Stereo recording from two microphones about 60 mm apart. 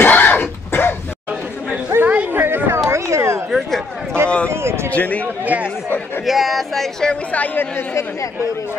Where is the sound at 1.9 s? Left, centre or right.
Right.